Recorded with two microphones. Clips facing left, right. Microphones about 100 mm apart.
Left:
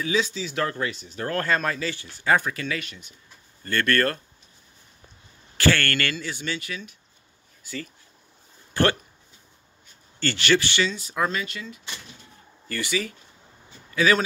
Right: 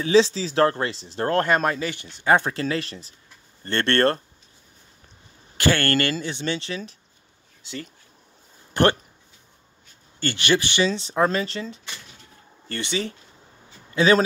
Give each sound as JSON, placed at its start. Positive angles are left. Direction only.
{"t": 0.0, "sound": "speech", "side_deg": -30}
{"t": 5.6, "sound": "speech", "side_deg": -20}
{"t": 10.2, "sound": "speech", "side_deg": -20}
{"t": 10.9, "sound": "speech", "side_deg": -30}